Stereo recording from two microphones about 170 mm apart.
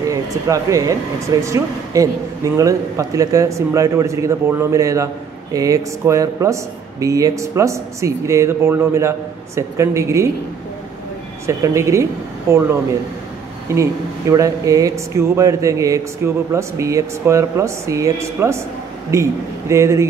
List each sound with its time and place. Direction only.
0.1 s speech: 20° right (ahead or behind)
11.4 s speech: 15° right (ahead or behind)